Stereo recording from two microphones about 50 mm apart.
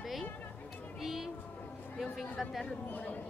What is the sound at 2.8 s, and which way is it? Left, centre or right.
Speech, left.